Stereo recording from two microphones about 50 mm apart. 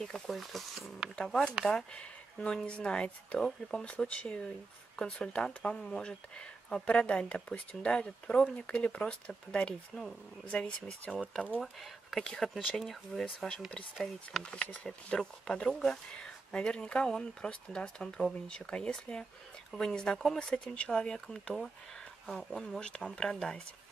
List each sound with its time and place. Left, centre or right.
0.0 s speech: centre
1.1 s speech: centre
2.0 s speech: centre
11.6 s speech: centre
14.4 s speech: left; by 16.0 s centre
16.2 s speech: centre
20.3 s speech: centre
22.8 s speech: centre